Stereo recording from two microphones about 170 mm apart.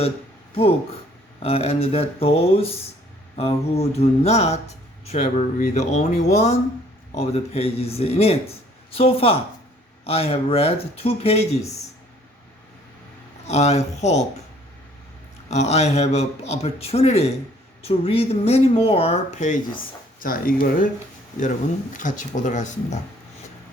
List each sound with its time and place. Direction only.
1.4 s speech: 35° left (ahead or behind)
13.5 s speech: 40° left (ahead or behind)
15.4 s speech: 40° left (ahead or behind)
20.1 s speech: 55° left (ahead or behind)
21.9 s speech: 50° left (ahead or behind)